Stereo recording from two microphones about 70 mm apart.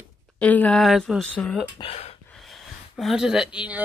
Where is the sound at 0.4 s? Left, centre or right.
Left.